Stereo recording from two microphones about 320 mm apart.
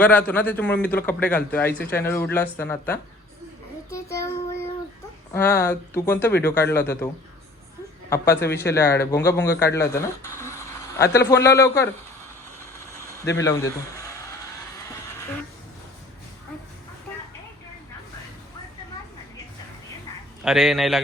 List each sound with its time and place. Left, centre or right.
0.0 s a man's voice: centre
3.9 s child singing: centre
5.3 s speech: centre
8.1 s speech: centre
13.2 s speech: left
13.5 s a sound: centre
20.4 s a man's voice: centre